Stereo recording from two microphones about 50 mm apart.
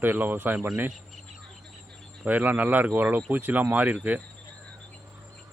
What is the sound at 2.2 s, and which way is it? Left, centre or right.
Speech, right.